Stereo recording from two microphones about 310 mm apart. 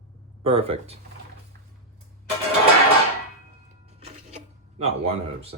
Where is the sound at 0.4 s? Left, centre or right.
Centre.